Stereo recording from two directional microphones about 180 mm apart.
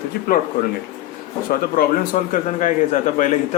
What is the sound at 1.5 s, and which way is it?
Speech, 55° left (ahead or behind).